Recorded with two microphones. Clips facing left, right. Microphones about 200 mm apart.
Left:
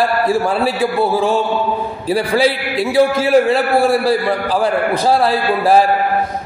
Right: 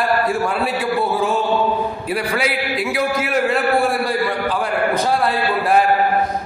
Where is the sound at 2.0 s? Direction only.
30° left (ahead or behind).